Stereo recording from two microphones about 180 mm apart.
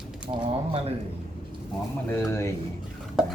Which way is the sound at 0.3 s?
35° right (ahead or behind).